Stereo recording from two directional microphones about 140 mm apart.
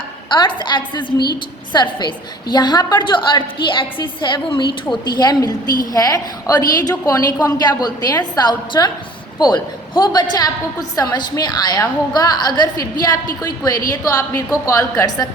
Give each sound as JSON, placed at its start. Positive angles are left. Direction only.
{"t": 0.3, "sound": "a woman's voice", "side_deg": 35}